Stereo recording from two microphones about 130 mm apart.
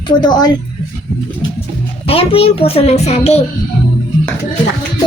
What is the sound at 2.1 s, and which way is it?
A child's voice, 45° left (ahead or behind).